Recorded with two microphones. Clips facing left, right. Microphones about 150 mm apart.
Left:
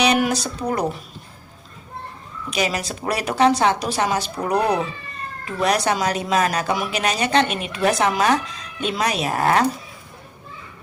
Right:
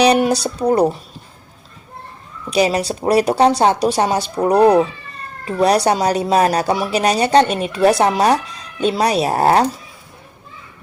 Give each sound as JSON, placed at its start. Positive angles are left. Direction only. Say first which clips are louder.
{"t": 0.0, "sound": "speech", "louder": "right 5 dB", "side_deg": -35}
{"t": 2.5, "sound": "a woman's voice", "louder": "right 8 dB", "side_deg": -30}